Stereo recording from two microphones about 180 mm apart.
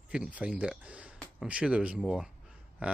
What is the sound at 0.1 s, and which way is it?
Speech, 5° right (ahead or behind).